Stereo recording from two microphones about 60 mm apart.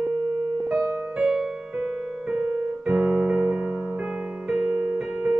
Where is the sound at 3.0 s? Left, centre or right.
Centre.